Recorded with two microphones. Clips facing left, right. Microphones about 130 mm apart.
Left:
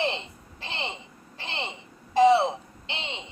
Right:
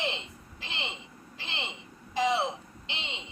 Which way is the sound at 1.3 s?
30° left (ahead or behind).